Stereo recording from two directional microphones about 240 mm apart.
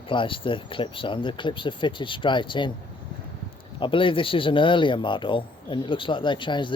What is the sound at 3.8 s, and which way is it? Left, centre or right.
Speech, left.